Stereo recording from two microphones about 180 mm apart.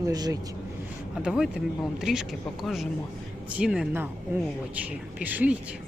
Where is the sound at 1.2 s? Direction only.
5° right (ahead or behind).